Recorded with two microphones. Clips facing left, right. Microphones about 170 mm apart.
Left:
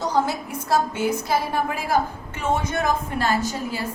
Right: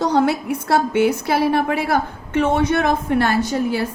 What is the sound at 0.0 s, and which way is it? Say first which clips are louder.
A woman's voice: right 6 dB; 65° right (ahead or behind).